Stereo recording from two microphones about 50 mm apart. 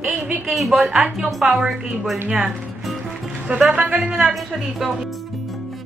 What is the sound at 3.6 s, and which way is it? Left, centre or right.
Speech, right.